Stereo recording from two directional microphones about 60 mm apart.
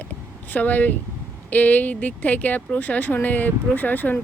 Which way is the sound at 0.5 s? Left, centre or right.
Left.